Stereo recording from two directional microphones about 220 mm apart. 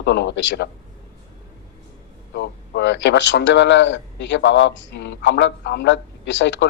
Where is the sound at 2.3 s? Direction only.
50° left (ahead or behind).